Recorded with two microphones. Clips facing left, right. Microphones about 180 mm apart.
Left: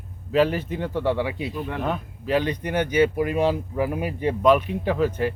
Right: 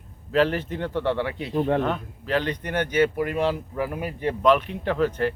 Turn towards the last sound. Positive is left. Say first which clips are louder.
# left 1 dB
turn(degrees=5)  # may be behind; listen again after turning